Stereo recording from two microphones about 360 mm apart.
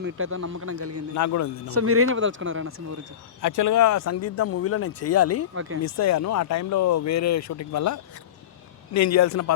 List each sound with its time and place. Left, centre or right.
0.0 s speech: right
1.1 s speech: left
1.7 s speech: right
3.4 s speech: left
5.5 s speech: right
5.8 s speech: left